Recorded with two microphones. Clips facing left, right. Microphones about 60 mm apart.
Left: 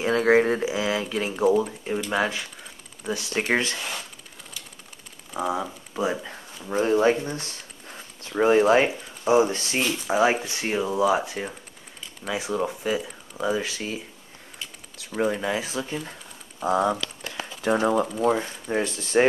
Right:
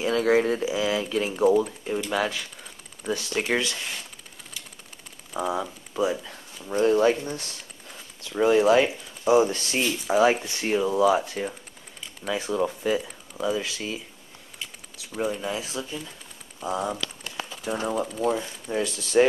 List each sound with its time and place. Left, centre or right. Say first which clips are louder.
0.0 s speech: left 2 dB; left
5.4 s speech: left 1 dB; centre
5.9 s speech: right 1 dB; left
9.8 s speech: right 1 dB; centre
13.5 s speech: left 1 dB; left
15.0 s speech: left 3 dB; left
15.5 s speech: left 3 dB; left
17.3 s a sound: left 8 dB; left
18.2 s speech: left 3 dB; left